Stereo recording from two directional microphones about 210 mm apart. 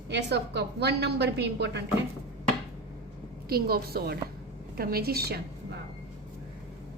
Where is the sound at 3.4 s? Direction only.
45° right (ahead or behind).